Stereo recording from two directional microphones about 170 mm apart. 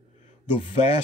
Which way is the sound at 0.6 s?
40° left (ahead or behind).